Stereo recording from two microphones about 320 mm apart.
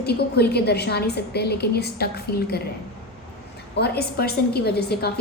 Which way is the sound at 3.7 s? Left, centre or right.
Left.